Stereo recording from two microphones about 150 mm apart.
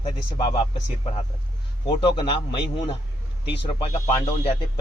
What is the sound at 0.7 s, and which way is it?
Speech, 40° left (ahead or behind).